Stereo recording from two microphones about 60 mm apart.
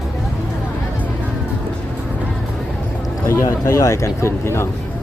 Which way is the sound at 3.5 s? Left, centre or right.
Left.